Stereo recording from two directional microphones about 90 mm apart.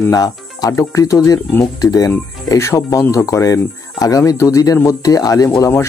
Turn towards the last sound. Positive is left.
turn(degrees=40)  # may be behind; listen again after turning